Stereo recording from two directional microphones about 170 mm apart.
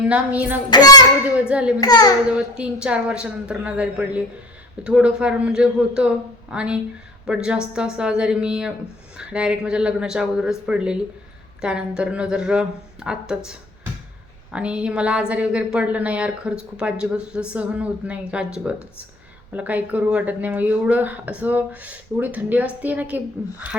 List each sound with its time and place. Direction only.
0.1 s speech: 10° right (ahead or behind)
0.7 s a child's voice: 25° left (ahead or behind)
1.2 s speech: 10° right (ahead or behind)
1.8 s a child's voice: 25° left (ahead or behind)
2.3 s a man's voice: 5° right (ahead or behind)